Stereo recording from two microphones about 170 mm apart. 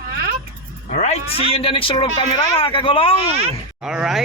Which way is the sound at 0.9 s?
40° left (ahead or behind).